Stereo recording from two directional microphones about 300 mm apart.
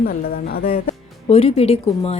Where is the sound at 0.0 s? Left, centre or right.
Left.